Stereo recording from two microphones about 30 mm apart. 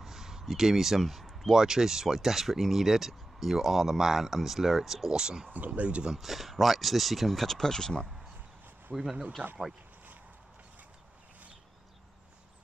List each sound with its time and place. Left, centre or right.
0.0 s a sound: centre
1.5 s speech: centre
5.1 s speech: right
5.7 s speech: right
6.1 s speech: centre
7.5 s speech: centre
9.4 s speech: right